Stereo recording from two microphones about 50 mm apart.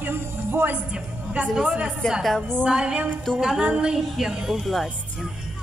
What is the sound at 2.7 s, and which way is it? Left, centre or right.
Music, centre.